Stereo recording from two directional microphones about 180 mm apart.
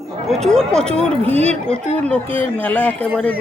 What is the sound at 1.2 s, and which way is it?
Speech, 35° right (ahead or behind).